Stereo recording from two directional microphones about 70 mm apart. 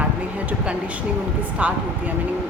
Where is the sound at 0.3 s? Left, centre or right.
Centre.